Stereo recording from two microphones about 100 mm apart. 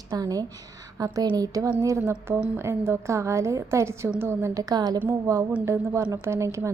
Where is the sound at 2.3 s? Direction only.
10° right (ahead or behind).